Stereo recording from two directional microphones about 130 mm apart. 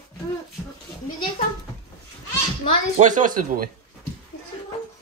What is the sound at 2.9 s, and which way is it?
Speech, 75° right (ahead or behind).